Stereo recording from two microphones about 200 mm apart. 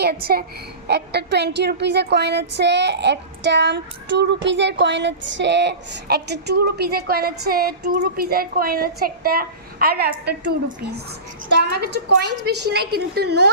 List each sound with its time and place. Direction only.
0.3 s a woman's voice: 45° right (ahead or behind)
11.6 s a woman's voice: 55° right (ahead or behind)